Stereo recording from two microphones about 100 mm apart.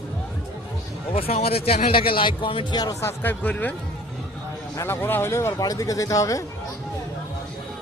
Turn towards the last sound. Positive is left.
turn(degrees=35)  # may be behind; listen again after turning